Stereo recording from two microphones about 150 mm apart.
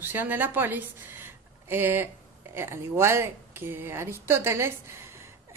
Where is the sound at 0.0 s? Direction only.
15° right (ahead or behind).